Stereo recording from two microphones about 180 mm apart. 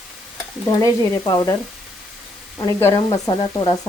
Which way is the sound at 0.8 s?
20° left (ahead or behind).